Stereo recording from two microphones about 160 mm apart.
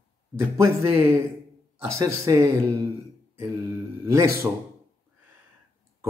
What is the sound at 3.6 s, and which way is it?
Speech, 20° right (ahead or behind).